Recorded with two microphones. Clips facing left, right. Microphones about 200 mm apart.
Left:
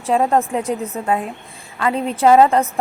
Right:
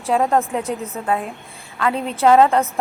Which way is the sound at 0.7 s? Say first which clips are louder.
Left 3 dB; 30° left (ahead or behind).